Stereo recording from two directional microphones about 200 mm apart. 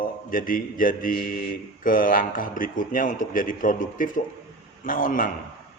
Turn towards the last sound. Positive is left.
turn(degrees=45)  # may be behind; listen again after turning